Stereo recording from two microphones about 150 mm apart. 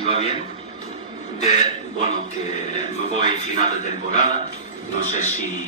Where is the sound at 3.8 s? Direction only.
55° left (ahead or behind).